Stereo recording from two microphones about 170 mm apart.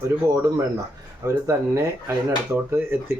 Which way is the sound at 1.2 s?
15° right (ahead or behind).